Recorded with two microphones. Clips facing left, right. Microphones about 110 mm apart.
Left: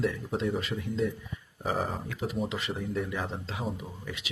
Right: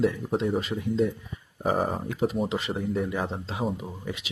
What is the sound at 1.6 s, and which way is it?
Speech, 45° right (ahead or behind).